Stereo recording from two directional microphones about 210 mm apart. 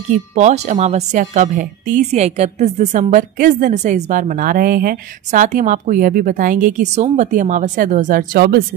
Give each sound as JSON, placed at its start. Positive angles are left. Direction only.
{"t": 0.1, "sound": "a woman's voice", "side_deg": -35}